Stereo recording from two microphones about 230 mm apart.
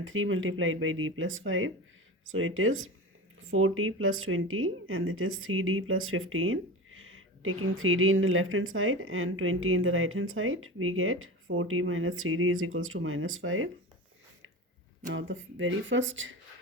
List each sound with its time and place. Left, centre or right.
0.0 s speech: right
15.1 s speech: right